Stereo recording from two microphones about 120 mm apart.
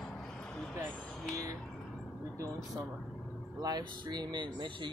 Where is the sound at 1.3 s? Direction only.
30° right (ahead or behind).